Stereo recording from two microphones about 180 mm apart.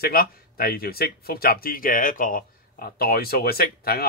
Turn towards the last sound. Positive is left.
turn(degrees=60)  # may be behind; listen again after turning